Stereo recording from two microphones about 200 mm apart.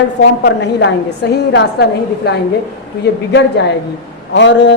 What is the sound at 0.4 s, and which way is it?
A woman's voice, 60° left (ahead or behind).